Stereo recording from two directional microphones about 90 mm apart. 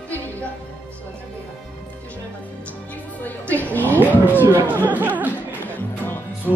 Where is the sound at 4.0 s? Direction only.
20° left (ahead or behind).